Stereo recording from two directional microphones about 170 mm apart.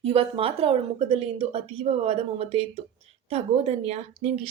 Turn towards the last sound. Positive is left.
turn(degrees=-40)  # may be behind; listen again after turning